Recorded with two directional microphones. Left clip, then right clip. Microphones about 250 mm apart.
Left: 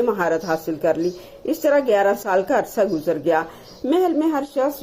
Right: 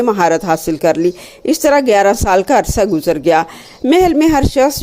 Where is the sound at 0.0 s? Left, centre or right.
Right.